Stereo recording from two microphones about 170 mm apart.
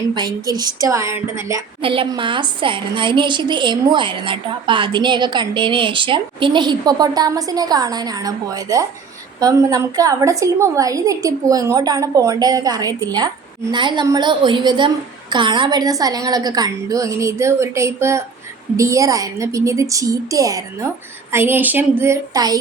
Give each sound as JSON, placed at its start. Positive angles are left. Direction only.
{"t": 0.1, "sound": "a woman's voice", "side_deg": -25}
{"t": 1.8, "sound": "a woman's voice", "side_deg": -30}